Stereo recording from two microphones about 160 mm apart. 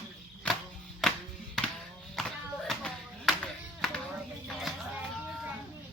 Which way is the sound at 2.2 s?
Centre (ahead or behind).